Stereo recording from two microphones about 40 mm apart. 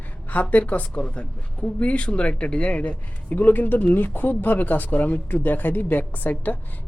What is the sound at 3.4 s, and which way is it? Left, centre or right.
A woman's voice, left.